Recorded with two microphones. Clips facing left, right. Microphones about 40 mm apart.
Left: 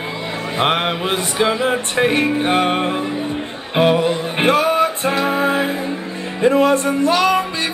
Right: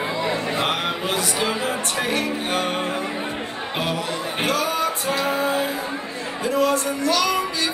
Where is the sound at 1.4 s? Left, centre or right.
Left.